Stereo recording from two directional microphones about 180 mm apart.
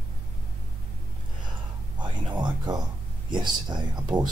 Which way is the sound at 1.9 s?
25° right (ahead or behind).